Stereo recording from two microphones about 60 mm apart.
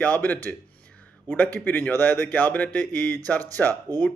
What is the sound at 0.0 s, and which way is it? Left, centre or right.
Speech, left.